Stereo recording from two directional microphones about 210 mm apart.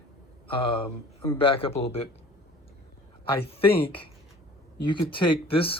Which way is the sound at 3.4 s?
25° left (ahead or behind).